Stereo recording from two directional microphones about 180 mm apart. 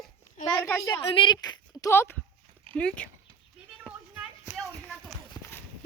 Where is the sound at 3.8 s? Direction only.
5° right (ahead or behind).